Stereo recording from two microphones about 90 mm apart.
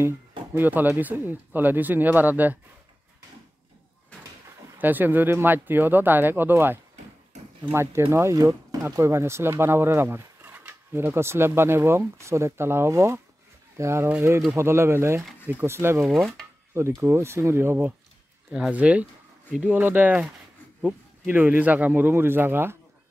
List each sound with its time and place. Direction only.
0.6 s speech: 20° right (ahead or behind)
4.7 s speech: 20° right (ahead or behind)
16.1 s speech: centre (ahead or behind)
16.7 s speech: 30° right (ahead or behind)
18.5 s speech: 15° right (ahead or behind)